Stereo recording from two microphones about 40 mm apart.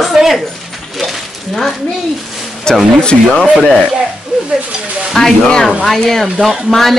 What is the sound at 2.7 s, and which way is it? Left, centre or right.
Speech, centre.